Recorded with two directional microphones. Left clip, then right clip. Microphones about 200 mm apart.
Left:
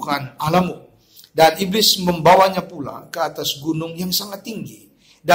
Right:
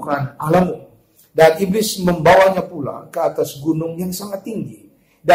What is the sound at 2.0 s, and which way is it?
A man's voice, 25° left (ahead or behind).